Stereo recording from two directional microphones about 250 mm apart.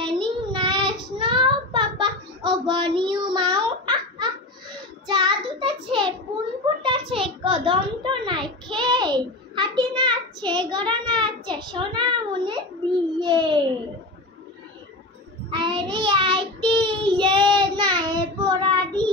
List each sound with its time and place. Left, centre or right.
0.0 s child singing: centre
6.8 s a sound: centre
15.5 s child singing: centre